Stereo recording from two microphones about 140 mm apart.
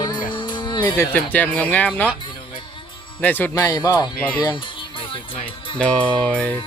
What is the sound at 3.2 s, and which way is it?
Speech, 15° left (ahead or behind).